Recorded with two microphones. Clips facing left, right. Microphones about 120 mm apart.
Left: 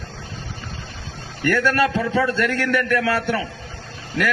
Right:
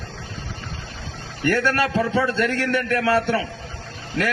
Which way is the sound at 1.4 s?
25° right (ahead or behind).